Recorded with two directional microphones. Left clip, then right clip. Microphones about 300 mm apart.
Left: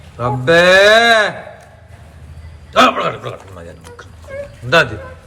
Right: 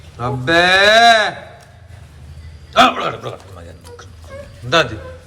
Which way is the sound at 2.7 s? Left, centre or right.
Centre.